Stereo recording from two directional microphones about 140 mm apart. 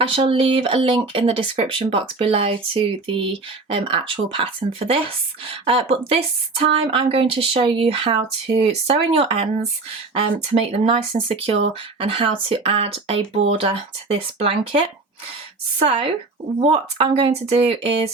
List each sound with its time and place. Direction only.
0.0 s speech: 40° right (ahead or behind)
15.8 s speech: 40° right (ahead or behind)